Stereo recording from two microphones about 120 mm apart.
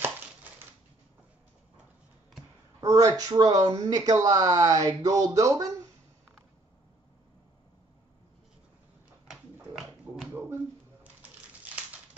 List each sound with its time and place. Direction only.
2.8 s speech: 30° right (ahead or behind)
9.3 s dog: centre (ahead or behind)